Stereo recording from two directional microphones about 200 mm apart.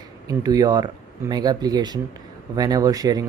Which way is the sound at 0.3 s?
20° right (ahead or behind).